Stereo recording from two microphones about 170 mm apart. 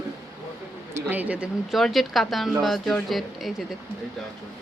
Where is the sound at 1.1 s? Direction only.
10° right (ahead or behind).